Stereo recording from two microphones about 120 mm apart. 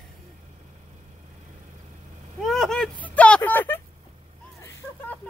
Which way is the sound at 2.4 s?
Centre (ahead or behind).